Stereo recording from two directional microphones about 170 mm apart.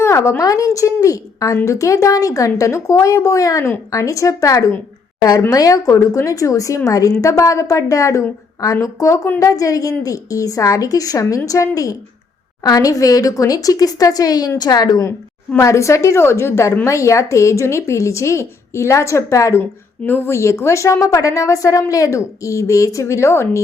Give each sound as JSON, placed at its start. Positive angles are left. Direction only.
{"t": 0.0, "sound": "a woman's voice", "side_deg": 15}